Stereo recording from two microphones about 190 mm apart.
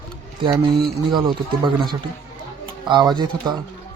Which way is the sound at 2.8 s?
25° right (ahead or behind).